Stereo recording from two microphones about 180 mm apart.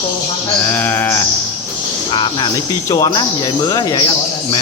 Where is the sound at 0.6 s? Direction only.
10° left (ahead or behind).